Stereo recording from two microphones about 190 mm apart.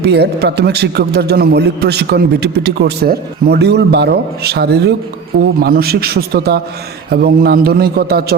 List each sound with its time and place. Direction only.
0.0 s a man's voice: 60° right (ahead or behind)